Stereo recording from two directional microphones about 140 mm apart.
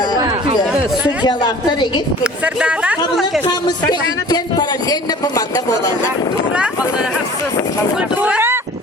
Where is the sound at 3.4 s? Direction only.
30° left (ahead or behind).